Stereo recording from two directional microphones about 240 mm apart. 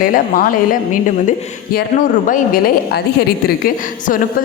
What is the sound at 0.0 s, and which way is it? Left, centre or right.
Speech, left.